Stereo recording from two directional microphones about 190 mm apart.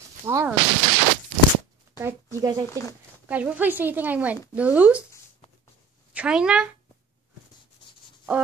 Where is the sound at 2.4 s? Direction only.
20° right (ahead or behind).